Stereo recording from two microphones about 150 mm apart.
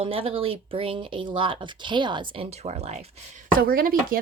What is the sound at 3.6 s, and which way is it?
Speech, 70° right (ahead or behind).